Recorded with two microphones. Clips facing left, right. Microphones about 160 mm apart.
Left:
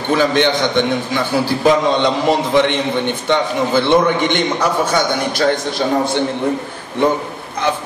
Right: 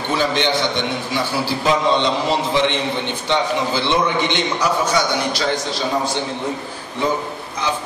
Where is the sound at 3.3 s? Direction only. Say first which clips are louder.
Left 1 dB; 55° left (ahead or behind).